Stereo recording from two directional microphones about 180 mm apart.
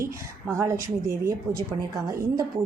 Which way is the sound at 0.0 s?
15° right (ahead or behind).